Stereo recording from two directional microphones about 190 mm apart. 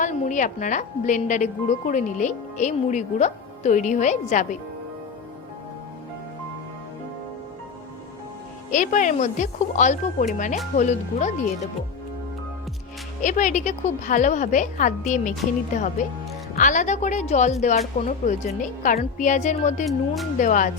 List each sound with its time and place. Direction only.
0.0 s a woman's voice: 40° left (ahead or behind)
8.7 s a woman's voice: 40° left (ahead or behind)
13.2 s a woman's voice: 40° left (ahead or behind)
16.6 s a woman's voice: 40° left (ahead or behind)
19.8 s speech: centre (ahead or behind)
20.4 s speech: 45° left (ahead or behind)